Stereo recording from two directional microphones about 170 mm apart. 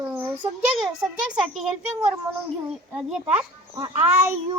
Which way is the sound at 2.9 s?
5° right (ahead or behind).